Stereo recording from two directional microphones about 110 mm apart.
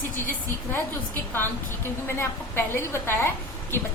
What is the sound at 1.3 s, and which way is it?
A woman's voice, 20° left (ahead or behind).